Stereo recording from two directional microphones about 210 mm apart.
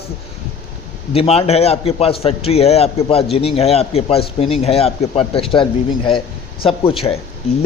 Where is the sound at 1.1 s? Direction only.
30° left (ahead or behind).